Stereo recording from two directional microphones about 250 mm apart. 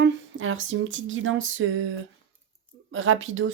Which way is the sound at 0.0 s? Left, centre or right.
Right.